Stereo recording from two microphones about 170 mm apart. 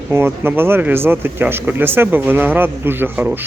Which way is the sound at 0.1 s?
15° right (ahead or behind).